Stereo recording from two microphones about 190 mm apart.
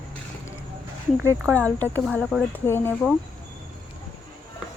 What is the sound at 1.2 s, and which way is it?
Speech, 15° right (ahead or behind).